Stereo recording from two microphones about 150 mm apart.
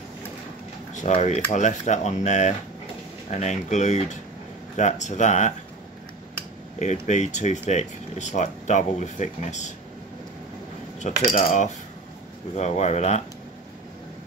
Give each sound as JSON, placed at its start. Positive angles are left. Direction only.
{"t": 0.9, "sound": "speech", "side_deg": 50}
{"t": 6.8, "sound": "speech", "side_deg": 50}
{"t": 11.0, "sound": "speech", "side_deg": 55}